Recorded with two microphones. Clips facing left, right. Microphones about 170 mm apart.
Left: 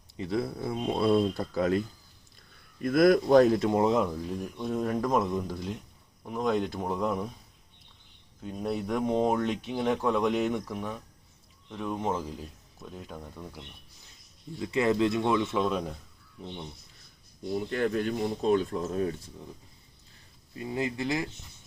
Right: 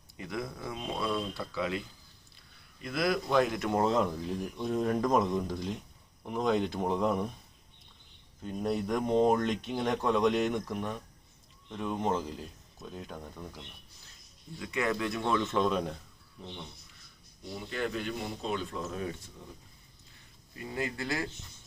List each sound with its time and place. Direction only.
0.2 s speech: 30° left (ahead or behind)
2.8 s speech: 50° left (ahead or behind)
3.7 s speech: 15° left (ahead or behind)
8.4 s speech: 5° left (ahead or behind)
14.6 s speech: 25° left (ahead or behind); by 16.0 s 5° left (ahead or behind)
17.5 s speech: 45° left (ahead or behind)
20.5 s speech: 20° left (ahead or behind)